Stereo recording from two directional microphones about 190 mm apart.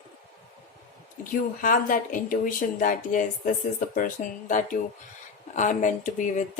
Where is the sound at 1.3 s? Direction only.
45° left (ahead or behind).